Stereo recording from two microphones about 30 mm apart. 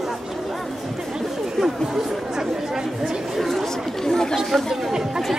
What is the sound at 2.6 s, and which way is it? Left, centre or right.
Speech, centre.